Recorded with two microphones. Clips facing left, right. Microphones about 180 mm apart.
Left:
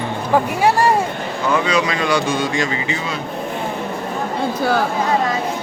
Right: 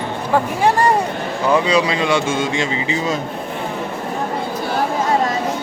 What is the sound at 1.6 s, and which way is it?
Speech, 30° right (ahead or behind).